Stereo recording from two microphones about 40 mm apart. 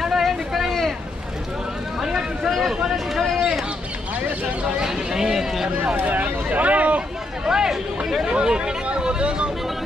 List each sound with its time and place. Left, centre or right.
0.0 s vehicle: centre
0.7 s boat: centre
2.0 s a sound: centre
4.7 s a sound: centre
6.2 s vehicle: right
7.4 s chatter: centre
8.8 s vehicle: right